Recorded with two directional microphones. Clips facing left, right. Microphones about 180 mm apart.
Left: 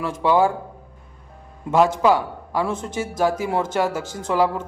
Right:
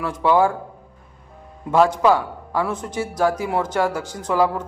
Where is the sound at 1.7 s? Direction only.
20° left (ahead or behind).